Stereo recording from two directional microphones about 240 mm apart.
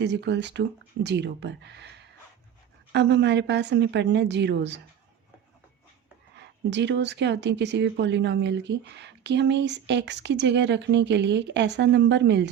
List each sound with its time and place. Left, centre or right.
0.0 s speech: right
6.3 s speech: right